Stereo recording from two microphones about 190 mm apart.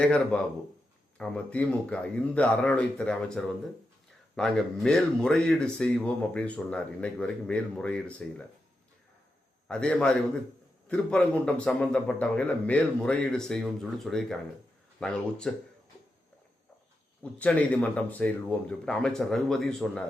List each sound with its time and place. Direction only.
0.0 s speech: 5° left (ahead or behind)
9.6 s speech: 5° left (ahead or behind)
17.3 s speech: 5° left (ahead or behind)